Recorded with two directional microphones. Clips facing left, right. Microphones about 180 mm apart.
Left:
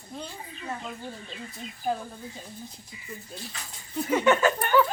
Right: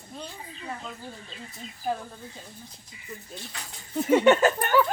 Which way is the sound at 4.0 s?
25° right (ahead or behind).